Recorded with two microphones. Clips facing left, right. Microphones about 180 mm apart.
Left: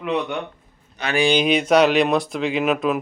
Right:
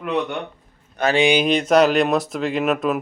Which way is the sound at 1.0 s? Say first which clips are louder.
Right 7 dB; 55° right (ahead or behind).